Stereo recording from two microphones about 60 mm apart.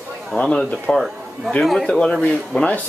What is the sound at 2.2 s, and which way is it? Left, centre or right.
Speech, left.